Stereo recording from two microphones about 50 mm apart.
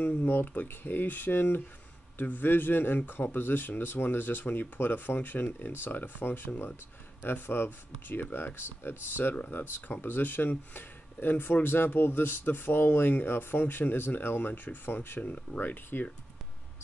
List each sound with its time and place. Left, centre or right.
0.6 s speech: left
9.3 s speech: left